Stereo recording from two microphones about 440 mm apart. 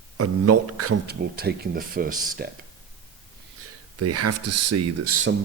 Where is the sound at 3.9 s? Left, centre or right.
Right.